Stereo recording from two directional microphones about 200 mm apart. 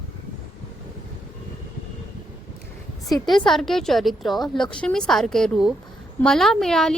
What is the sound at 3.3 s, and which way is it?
A woman's voice, centre (ahead or behind).